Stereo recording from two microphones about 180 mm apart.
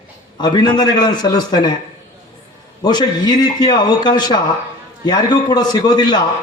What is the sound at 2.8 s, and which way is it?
A man's voice, 25° left (ahead or behind).